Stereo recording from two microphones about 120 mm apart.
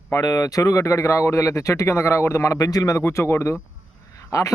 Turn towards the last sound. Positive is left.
turn(degrees=25)  # may be behind; listen again after turning